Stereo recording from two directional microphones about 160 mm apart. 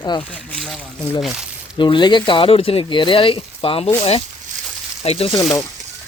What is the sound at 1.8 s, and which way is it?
Speech, 30° left (ahead or behind).